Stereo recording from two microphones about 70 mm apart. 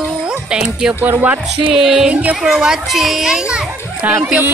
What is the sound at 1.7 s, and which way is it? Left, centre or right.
Speech, centre.